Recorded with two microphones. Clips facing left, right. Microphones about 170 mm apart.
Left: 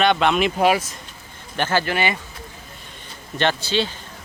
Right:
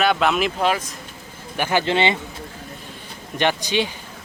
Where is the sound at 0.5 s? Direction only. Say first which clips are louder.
Left 3 dB; 10° left (ahead or behind).